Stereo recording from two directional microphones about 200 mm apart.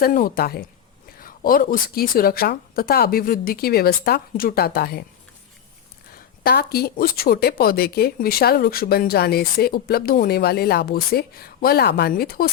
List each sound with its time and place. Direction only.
0.0 s speech: 45° left (ahead or behind)
1.2 s a sound: 45° left (ahead or behind)
1.7 s speech: 50° left (ahead or behind)
6.4 s speech: 50° left (ahead or behind)